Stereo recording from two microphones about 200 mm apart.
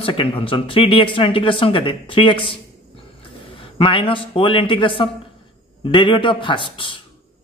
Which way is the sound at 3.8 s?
25° left (ahead or behind).